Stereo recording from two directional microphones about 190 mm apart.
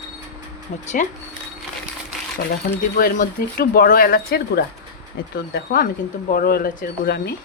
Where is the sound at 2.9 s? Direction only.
50° left (ahead or behind).